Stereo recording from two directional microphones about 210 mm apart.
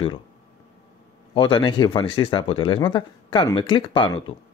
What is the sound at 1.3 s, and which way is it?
Speech, 25° left (ahead or behind).